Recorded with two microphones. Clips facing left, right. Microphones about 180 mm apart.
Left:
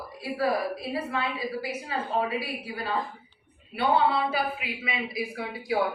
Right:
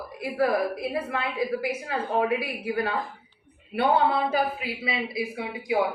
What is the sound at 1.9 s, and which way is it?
A woman's voice, 60° right (ahead or behind).